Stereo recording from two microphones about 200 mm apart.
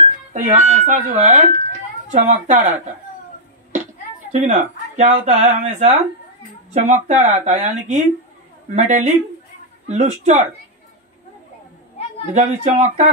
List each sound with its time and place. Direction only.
0.3 s speech: 35° right (ahead or behind)
4.3 s speech: 35° right (ahead or behind)
12.4 s speech: 35° right (ahead or behind)